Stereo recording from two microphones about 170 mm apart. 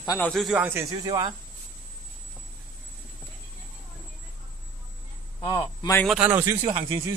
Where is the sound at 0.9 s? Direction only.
25° right (ahead or behind).